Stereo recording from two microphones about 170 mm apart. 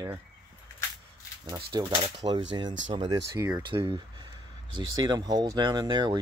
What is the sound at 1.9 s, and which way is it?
Speech, 30° right (ahead or behind).